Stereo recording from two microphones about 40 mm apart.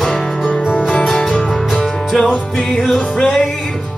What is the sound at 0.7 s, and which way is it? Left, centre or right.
Music, left.